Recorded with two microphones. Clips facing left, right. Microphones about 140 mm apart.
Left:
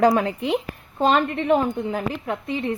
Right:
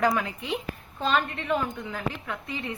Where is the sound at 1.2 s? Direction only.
40° left (ahead or behind).